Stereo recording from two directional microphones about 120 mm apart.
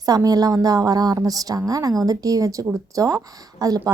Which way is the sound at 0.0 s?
30° right (ahead or behind).